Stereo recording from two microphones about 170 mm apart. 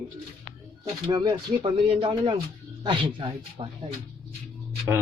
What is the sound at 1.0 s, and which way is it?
Speech, 25° right (ahead or behind).